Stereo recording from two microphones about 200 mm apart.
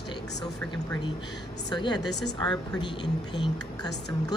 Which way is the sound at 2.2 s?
5° left (ahead or behind).